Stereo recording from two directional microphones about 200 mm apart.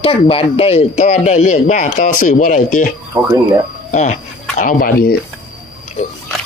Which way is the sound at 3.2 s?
25° right (ahead or behind).